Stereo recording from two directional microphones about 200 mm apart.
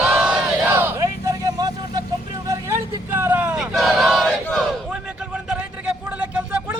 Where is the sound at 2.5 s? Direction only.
15° right (ahead or behind).